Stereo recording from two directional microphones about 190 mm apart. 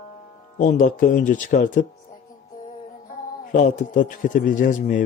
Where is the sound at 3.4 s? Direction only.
40° left (ahead or behind).